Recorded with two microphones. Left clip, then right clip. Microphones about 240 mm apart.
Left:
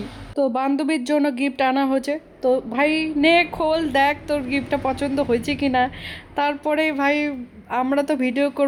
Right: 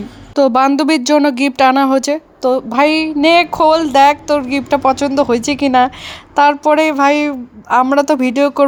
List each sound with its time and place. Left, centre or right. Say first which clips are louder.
0.3 s speech: right 10 dB; right